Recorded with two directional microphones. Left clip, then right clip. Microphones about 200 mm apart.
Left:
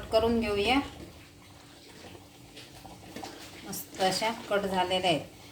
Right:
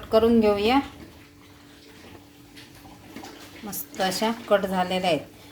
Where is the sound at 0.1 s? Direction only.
30° right (ahead or behind).